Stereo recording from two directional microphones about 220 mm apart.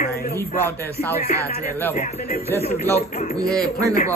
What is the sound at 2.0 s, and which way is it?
Speech, 30° left (ahead or behind).